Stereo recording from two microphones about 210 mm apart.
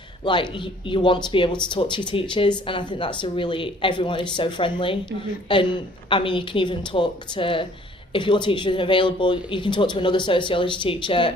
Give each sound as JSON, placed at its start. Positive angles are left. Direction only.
{"t": 0.3, "sound": "speech", "side_deg": 20}